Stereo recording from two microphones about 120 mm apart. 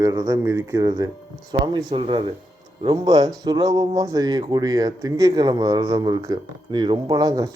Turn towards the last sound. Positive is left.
turn(degrees=-30)  # may be behind; listen again after turning